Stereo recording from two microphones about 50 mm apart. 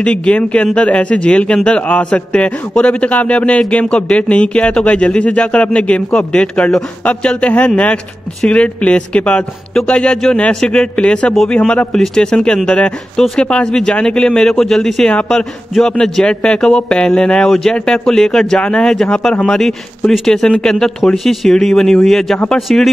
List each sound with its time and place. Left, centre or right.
0.0 s speech: left